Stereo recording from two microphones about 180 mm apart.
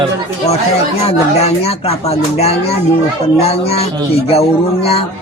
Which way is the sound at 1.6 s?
35° left (ahead or behind).